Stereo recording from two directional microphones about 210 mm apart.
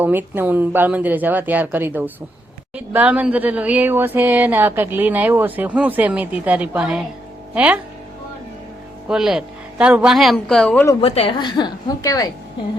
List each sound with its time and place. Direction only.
0.0 s speech: 10° right (ahead or behind)
9.0 s speech: centre (ahead or behind)
11.0 s a woman's voice: 25° left (ahead or behind)